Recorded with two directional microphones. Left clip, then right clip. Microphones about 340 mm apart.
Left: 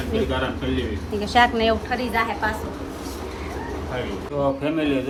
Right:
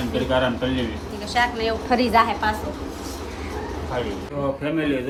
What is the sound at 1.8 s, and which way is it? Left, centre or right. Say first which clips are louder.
Speech: right 5 dB; centre.